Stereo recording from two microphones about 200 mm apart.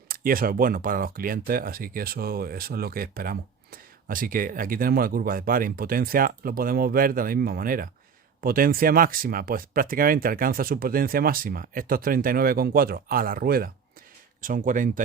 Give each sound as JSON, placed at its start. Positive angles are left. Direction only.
{"t": 0.1, "sound": "speech", "side_deg": -45}